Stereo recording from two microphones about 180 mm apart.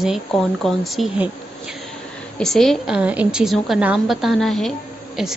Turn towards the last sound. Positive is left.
turn(degrees=0)  # may be behind; listen again after turning